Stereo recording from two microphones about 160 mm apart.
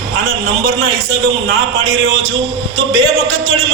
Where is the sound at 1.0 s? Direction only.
90° right.